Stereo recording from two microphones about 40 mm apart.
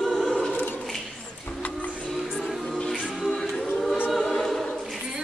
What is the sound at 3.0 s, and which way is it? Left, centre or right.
Music, centre.